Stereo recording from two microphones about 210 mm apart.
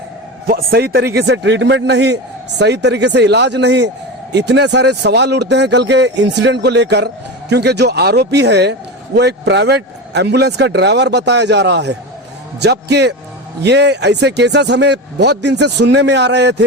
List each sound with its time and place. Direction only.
0.4 s a man's voice: 45° right (ahead or behind)